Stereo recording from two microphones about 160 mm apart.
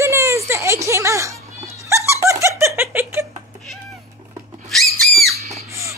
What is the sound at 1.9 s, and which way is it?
Giggle, 15° right (ahead or behind).